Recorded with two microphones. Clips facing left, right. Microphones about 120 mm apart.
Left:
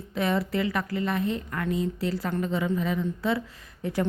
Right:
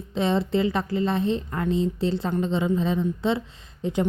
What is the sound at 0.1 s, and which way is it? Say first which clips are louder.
A woman's voice: right 3 dB; 25° right (ahead or behind).